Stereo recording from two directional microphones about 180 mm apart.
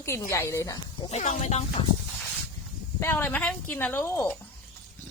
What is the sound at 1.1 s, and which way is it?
Speech, 40° left (ahead or behind).